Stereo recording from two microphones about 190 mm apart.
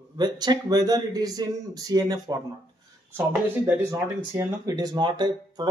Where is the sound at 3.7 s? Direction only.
15° right (ahead or behind).